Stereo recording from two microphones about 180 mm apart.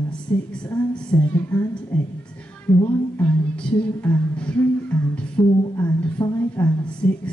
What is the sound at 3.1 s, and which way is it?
Music, 10° left (ahead or behind).